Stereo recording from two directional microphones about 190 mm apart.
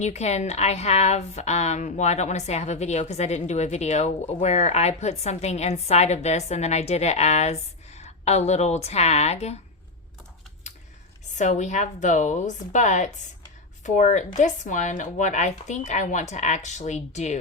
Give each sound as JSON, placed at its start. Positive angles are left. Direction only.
{"t": 0.0, "sound": "a woman's voice", "side_deg": 35}
{"t": 11.3, "sound": "a woman's voice", "side_deg": 40}